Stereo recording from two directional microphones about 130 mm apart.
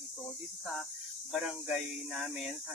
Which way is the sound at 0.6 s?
Centre (ahead or behind).